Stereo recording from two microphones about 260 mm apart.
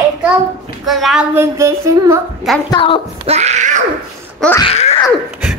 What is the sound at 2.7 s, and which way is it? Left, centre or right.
Speech, centre.